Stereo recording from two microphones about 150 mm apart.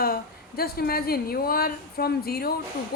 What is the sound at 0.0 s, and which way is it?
A woman's voice, 90° left.